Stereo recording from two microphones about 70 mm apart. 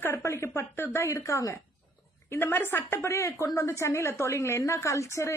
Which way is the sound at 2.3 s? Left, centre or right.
Left.